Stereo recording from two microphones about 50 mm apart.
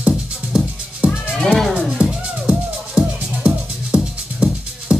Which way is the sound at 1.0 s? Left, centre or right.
Right.